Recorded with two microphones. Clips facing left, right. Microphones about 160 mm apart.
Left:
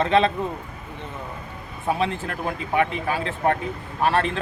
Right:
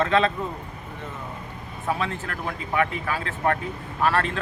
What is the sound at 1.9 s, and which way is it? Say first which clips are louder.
Speech: left 4 dB; 20° left (ahead or behind).